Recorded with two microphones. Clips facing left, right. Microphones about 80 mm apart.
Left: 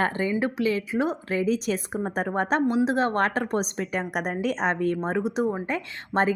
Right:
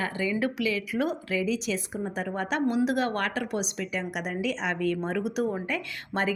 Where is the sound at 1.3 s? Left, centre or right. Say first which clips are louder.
Left 5 dB; left.